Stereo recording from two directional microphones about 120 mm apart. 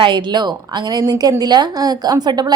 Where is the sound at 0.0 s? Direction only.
40° right (ahead or behind).